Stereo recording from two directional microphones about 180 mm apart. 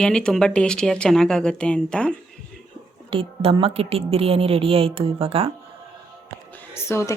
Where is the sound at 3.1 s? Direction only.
30° right (ahead or behind).